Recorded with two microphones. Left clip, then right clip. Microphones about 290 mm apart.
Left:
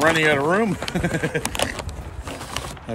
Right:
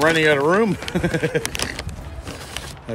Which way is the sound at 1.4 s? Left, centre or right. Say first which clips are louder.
Left 1 dB; centre.